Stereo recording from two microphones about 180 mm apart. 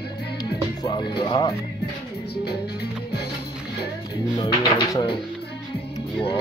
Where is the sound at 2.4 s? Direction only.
65° left (ahead or behind).